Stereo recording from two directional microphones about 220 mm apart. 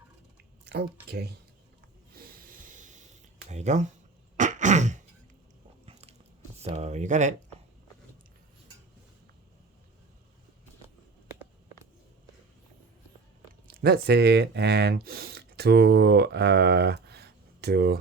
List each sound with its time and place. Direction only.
2.1 s snort: 40° right (ahead or behind)
3.5 s speech: 30° right (ahead or behind)
4.4 s throat clearing: 35° right (ahead or behind)
5.8 s biting: 30° right (ahead or behind)
6.6 s speech: 30° right (ahead or behind)
13.7 s speech: 45° right (ahead or behind)